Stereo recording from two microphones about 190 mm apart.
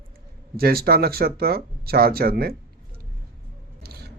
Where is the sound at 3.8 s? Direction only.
55° right (ahead or behind).